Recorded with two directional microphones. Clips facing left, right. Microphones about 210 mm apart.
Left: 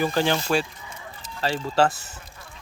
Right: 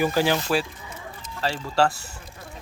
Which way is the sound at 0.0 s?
10° right (ahead or behind).